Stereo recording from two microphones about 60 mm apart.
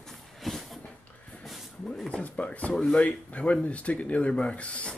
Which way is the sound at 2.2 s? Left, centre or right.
Left.